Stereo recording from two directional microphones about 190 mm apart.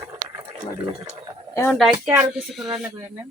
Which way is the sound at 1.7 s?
5° right (ahead or behind).